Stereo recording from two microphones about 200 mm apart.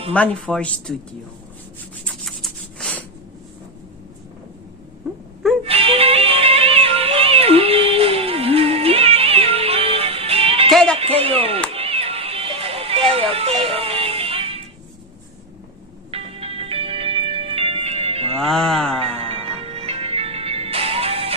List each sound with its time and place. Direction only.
0.1 s speech: 5° left (ahead or behind)
2.0 s writing: centre (ahead or behind)
5.6 s music: 30° right (ahead or behind)
10.7 s music: centre (ahead or behind)
10.9 s music: 30° right (ahead or behind)
16.1 s music: 30° right (ahead or behind)
18.3 s music: centre (ahead or behind)
19.0 s music: 30° right (ahead or behind)